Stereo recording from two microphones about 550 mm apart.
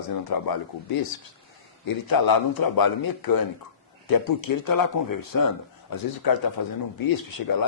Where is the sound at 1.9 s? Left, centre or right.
Left.